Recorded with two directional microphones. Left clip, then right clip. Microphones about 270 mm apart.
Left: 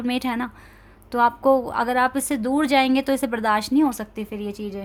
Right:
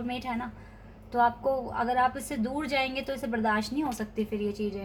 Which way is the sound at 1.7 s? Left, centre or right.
Left.